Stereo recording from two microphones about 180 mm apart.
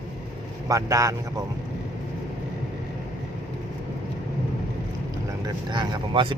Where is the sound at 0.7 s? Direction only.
20° right (ahead or behind).